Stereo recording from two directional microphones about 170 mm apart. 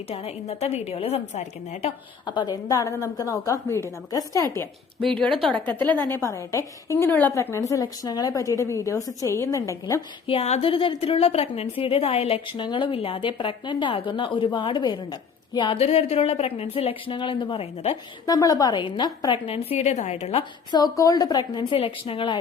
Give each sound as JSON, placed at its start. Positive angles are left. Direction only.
{"t": 0.1, "sound": "a woman's voice", "side_deg": 35}
{"t": 2.2, "sound": "a woman's voice", "side_deg": 25}
{"t": 6.0, "sound": "a woman's voice", "side_deg": 15}
{"t": 10.2, "sound": "a woman's voice", "side_deg": 40}
{"t": 18.3, "sound": "a woman's voice", "side_deg": 20}
{"t": 20.7, "sound": "a woman's voice", "side_deg": 20}